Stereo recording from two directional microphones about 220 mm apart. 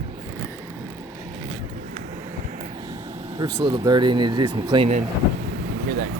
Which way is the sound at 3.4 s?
15° right (ahead or behind).